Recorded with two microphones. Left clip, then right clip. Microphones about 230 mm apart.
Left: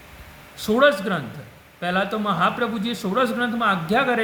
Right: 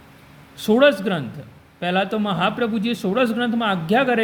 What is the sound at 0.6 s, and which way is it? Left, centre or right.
A man's voice, centre.